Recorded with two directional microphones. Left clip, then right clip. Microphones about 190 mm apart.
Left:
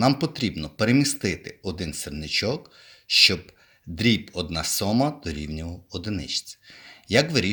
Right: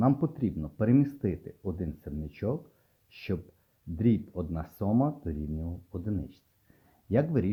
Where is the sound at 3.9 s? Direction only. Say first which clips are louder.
Left 7 dB; 15° left (ahead or behind).